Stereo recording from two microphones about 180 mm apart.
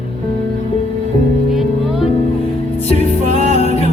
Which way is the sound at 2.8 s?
35° left (ahead or behind).